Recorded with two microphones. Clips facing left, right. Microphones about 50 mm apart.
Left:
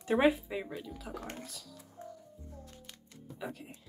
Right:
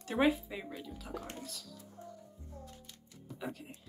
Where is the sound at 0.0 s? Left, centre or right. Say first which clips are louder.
Left 3 dB; centre.